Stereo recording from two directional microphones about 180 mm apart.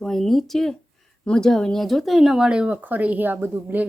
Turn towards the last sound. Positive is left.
turn(degrees=-10)  # may be behind; listen again after turning